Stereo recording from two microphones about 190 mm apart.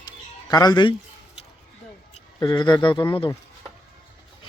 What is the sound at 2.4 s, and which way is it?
Speech, 25° left (ahead or behind).